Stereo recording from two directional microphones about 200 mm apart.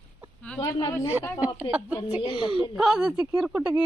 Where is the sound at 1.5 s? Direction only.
20° left (ahead or behind).